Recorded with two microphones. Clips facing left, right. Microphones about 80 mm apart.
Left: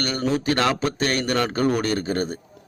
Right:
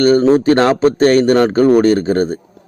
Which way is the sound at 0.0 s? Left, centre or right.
Right.